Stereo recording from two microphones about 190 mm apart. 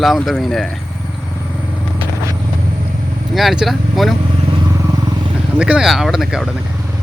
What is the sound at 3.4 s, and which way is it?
Speech, centre (ahead or behind).